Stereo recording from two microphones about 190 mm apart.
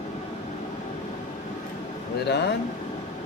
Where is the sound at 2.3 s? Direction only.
60° left (ahead or behind).